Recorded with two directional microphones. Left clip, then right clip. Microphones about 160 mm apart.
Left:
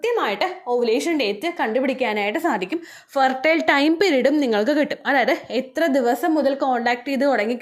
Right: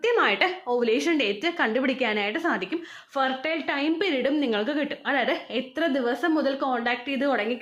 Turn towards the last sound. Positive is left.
turn(degrees=30)  # may be behind; listen again after turning